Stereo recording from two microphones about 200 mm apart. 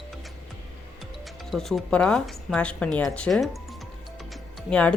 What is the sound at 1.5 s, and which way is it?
Speech, centre (ahead or behind).